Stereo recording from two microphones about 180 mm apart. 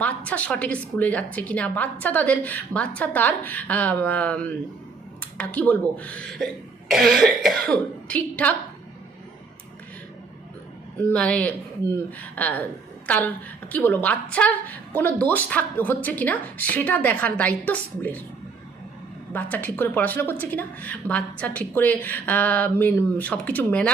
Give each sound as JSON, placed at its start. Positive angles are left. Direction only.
{"t": 0.3, "sound": "a woman's voice", "side_deg": 5}
{"t": 6.0, "sound": "cough", "side_deg": 5}
{"t": 11.1, "sound": "a woman's voice", "side_deg": 5}
{"t": 19.3, "sound": "a woman's voice", "side_deg": 10}